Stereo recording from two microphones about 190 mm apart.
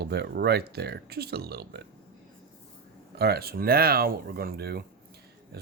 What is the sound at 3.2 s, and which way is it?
Speech, 55° right (ahead or behind).